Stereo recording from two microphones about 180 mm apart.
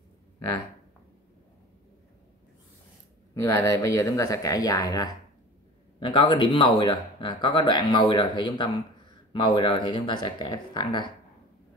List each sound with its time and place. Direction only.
3.3 s speech: 20° left (ahead or behind)